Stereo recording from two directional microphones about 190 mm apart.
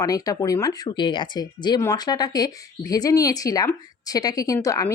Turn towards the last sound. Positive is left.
turn(degrees=15)  # may be behind; listen again after turning